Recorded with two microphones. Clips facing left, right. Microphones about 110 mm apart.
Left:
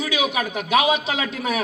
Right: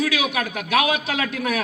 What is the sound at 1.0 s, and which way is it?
Speech, 25° left (ahead or behind).